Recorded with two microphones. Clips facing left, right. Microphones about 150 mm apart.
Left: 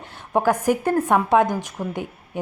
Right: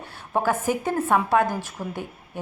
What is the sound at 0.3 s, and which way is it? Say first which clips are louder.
A woman's voice: left 4 dB; 15° left (ahead or behind).